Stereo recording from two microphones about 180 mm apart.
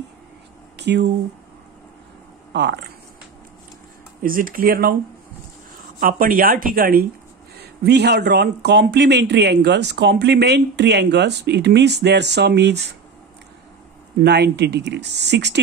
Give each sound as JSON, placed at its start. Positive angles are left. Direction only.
{"t": 0.7, "sound": "a sound", "side_deg": -70}
{"t": 2.5, "sound": "speech", "side_deg": -75}
{"t": 4.2, "sound": "speech", "side_deg": -50}
{"t": 5.9, "sound": "speech", "side_deg": -50}
{"t": 7.6, "sound": "speech", "side_deg": -65}
{"t": 14.2, "sound": "speech", "side_deg": -70}